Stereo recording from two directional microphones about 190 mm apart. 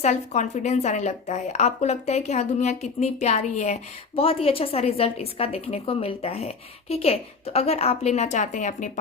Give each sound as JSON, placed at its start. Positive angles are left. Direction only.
{"t": 0.0, "sound": "speech", "side_deg": 40}